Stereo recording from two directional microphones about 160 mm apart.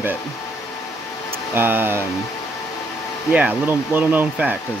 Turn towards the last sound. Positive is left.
turn(degrees=-10)  # may be behind; listen again after turning